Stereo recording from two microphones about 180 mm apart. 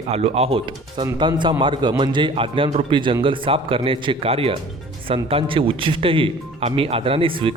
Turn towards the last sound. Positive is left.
turn(degrees=-30)  # may be behind; listen again after turning